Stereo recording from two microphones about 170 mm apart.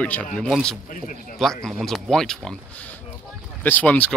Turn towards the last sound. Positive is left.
turn(degrees=10)  # may be behind; listen again after turning